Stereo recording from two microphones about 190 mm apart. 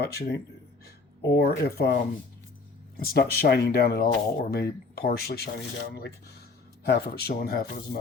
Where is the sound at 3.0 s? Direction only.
55° left (ahead or behind).